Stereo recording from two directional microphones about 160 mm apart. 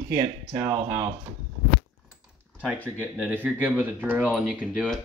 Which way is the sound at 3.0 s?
10° right (ahead or behind).